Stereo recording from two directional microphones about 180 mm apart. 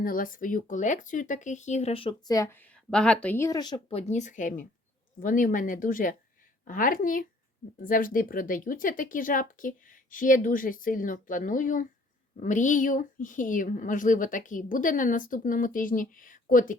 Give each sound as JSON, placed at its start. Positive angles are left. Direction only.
{"t": 0.0, "sound": "speech", "side_deg": 50}
{"t": 3.9, "sound": "a woman's voice", "side_deg": 40}